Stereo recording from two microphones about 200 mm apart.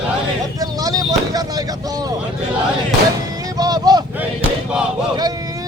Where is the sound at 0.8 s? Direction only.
20° right (ahead or behind).